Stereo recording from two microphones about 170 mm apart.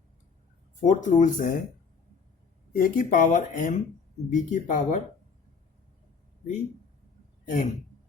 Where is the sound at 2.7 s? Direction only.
55° left (ahead or behind).